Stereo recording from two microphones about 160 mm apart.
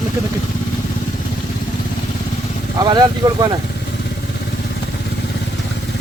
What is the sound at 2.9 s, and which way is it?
Speech, 25° right (ahead or behind).